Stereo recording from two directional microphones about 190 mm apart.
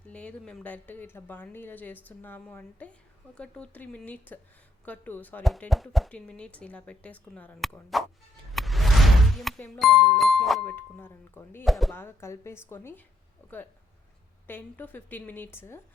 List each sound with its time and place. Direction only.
0.0 s speech: 5° left (ahead or behind)
11.6 s speech: centre (ahead or behind)
11.9 s speech: 15° left (ahead or behind)